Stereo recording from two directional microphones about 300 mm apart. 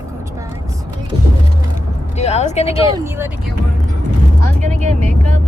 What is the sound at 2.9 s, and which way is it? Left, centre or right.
Speech, centre.